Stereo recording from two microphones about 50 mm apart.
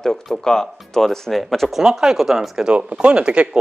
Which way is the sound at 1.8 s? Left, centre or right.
Centre.